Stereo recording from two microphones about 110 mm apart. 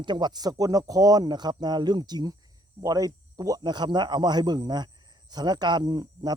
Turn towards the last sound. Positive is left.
turn(degrees=-40)  # may be behind; listen again after turning